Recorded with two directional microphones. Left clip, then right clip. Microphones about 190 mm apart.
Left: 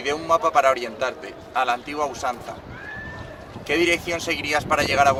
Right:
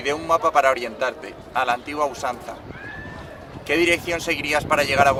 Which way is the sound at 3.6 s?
15° right (ahead or behind).